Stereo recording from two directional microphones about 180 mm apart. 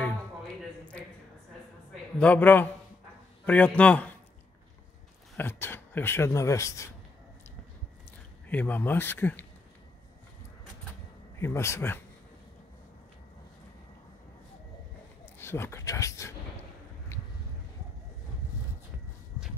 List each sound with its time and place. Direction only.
2.1 s speech: 10° left (ahead or behind)
5.4 s speech: 10° left (ahead or behind)
8.5 s speech: 10° left (ahead or behind)
11.3 s speech: 15° left (ahead or behind)
15.3 s speech: 15° left (ahead or behind)